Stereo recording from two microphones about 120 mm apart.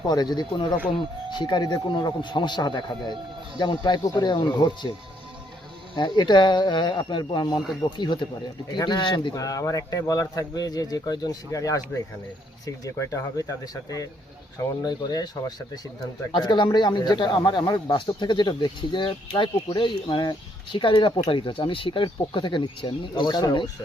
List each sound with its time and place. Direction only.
0.1 s a man's voice: 35° left (ahead or behind)
5.9 s a man's voice: 40° left (ahead or behind)